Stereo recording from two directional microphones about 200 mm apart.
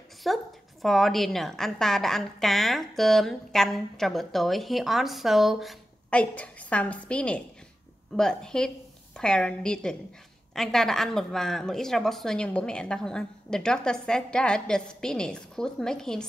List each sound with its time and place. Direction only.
0.2 s a woman's voice: centre (ahead or behind)